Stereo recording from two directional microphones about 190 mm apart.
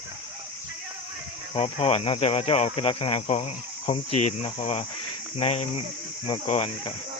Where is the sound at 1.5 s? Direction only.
30° left (ahead or behind).